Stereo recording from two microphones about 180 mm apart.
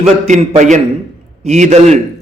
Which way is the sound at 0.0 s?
40° right (ahead or behind).